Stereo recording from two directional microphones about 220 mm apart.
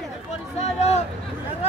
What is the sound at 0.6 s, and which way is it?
Speech, 30° left (ahead or behind).